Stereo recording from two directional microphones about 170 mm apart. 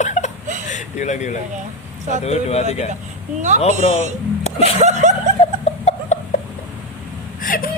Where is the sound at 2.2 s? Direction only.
40° left (ahead or behind).